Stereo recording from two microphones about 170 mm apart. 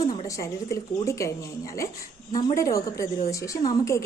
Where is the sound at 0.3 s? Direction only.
20° left (ahead or behind).